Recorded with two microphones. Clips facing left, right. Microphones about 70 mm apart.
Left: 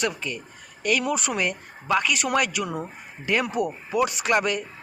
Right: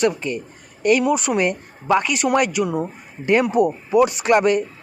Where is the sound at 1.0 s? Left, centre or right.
Centre.